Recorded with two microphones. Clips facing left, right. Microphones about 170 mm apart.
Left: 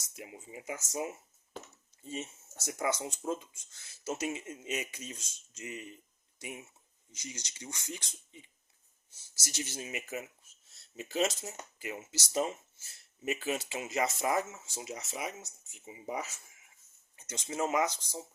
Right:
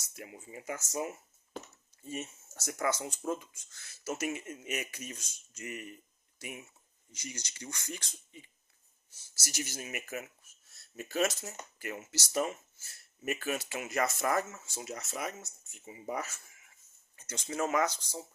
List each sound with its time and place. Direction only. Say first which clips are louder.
0.2 s speech: even; 20° left (ahead or behind)